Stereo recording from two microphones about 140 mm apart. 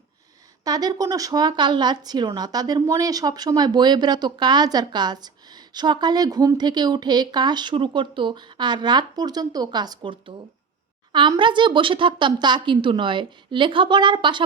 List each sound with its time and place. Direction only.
0.6 s speech: 25° right (ahead or behind)